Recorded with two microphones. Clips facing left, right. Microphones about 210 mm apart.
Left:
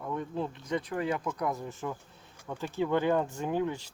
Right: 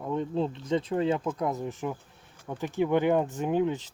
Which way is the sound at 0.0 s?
25° right (ahead or behind).